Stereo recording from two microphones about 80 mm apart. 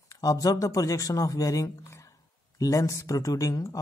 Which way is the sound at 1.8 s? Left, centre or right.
Left.